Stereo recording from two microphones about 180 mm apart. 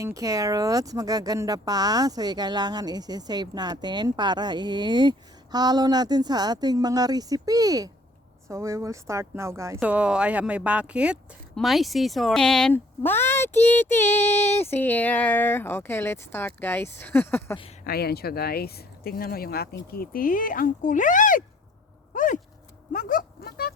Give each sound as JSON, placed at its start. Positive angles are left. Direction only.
{"t": 0.0, "sound": "speech", "side_deg": -20}
{"t": 17.8, "sound": "speech", "side_deg": 60}
{"t": 22.1, "sound": "a sound", "side_deg": 50}